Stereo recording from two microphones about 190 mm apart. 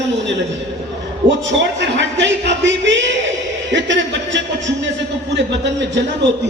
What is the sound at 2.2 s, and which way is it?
Music, 70° right (ahead or behind).